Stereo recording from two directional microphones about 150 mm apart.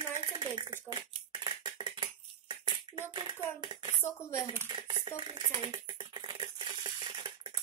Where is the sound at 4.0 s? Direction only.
15° left (ahead or behind).